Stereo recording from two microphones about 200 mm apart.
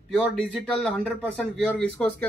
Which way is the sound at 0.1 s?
5° left (ahead or behind).